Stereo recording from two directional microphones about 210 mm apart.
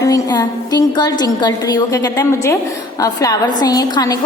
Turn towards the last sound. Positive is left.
turn(degrees=20)  # may be behind; listen again after turning